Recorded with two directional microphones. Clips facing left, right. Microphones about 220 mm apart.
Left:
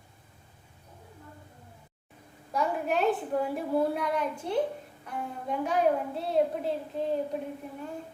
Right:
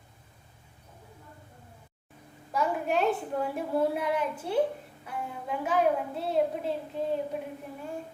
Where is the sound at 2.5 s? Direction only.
Centre (ahead or behind).